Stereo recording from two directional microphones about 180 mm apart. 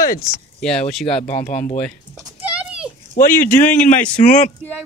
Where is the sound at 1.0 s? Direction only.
35° left (ahead or behind).